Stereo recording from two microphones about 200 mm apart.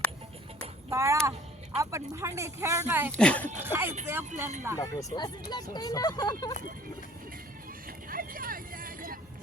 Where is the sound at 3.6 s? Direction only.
10° right (ahead or behind).